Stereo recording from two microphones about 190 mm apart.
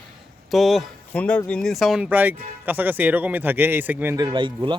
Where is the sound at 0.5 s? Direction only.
Centre (ahead or behind).